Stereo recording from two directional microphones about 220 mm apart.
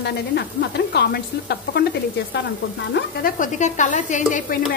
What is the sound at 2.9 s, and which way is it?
Sizzle, 40° left (ahead or behind).